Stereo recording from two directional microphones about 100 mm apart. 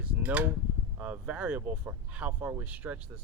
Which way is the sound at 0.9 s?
15° right (ahead or behind).